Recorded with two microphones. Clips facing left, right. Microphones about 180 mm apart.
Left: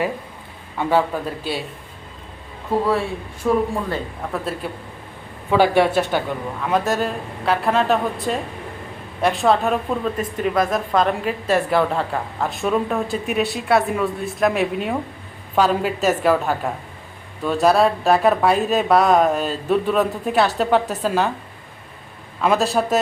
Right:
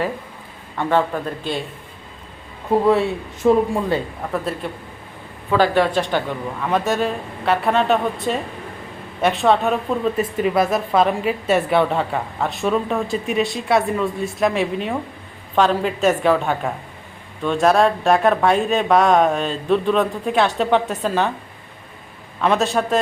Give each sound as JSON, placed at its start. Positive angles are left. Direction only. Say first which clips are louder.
{"t": 0.8, "sound": "speech", "louder": "even", "side_deg": 5}
{"t": 3.4, "sound": "speech", "louder": "right 4 dB", "side_deg": -25}
{"t": 4.6, "sound": "a woman's voice", "louder": "even", "side_deg": 5}
{"t": 22.4, "sound": "a woman's voice", "louder": "even", "side_deg": 0}